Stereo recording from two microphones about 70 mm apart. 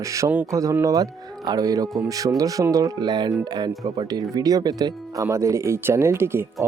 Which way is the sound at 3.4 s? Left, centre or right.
Right.